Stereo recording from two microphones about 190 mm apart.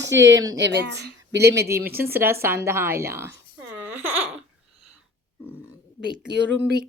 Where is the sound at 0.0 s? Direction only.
70° right (ahead or behind).